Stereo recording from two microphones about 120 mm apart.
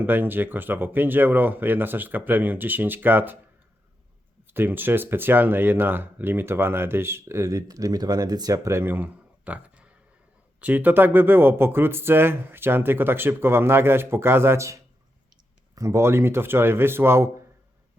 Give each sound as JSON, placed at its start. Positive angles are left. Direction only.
{"t": 0.0, "sound": "speech", "side_deg": -15}
{"t": 4.5, "sound": "speech", "side_deg": -15}